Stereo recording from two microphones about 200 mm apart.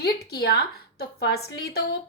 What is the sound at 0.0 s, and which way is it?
A woman's voice, 55° left (ahead or behind).